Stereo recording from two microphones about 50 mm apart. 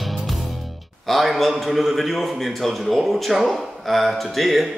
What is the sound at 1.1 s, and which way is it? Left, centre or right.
A man's voice, centre.